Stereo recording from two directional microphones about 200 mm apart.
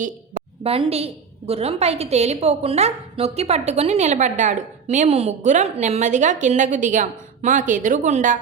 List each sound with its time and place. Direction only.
0.6 s a woman's voice: 30° right (ahead or behind)